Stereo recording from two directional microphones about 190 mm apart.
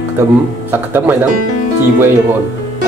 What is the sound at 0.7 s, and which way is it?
Speech, 10° right (ahead or behind).